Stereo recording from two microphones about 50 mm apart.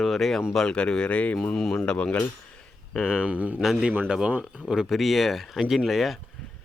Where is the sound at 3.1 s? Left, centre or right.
Right.